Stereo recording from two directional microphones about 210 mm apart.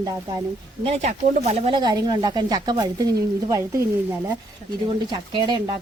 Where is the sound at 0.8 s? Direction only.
30° right (ahead or behind).